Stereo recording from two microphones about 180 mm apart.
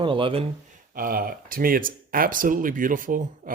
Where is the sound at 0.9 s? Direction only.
55° right (ahead or behind).